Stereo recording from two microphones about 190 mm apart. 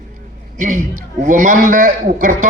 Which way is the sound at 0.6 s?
45° right (ahead or behind).